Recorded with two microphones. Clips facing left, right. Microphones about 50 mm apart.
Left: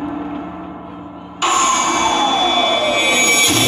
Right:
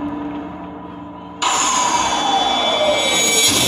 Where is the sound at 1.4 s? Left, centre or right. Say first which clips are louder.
Left 2 dB; left.